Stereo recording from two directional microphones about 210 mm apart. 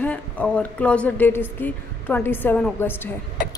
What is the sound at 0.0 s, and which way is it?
A woman's voice, 5° left (ahead or behind).